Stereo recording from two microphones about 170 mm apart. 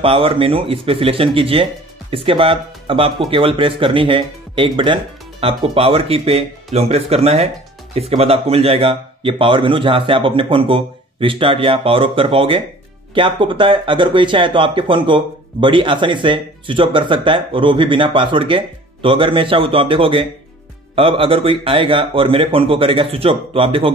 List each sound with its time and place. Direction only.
0.0 s a man's voice: 30° right (ahead or behind)